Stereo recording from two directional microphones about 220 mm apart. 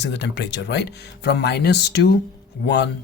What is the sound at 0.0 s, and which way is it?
Speech, 50° left (ahead or behind).